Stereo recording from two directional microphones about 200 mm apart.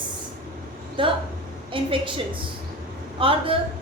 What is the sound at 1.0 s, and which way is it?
A woman's voice, 25° right (ahead or behind).